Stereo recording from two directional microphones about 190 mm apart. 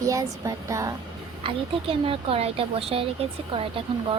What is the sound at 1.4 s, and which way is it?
A woman's voice, 30° right (ahead or behind).